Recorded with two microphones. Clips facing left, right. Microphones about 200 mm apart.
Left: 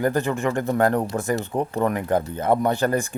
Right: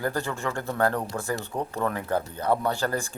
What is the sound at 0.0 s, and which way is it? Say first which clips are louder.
Speech: left 7 dB; 20° left (ahead or behind).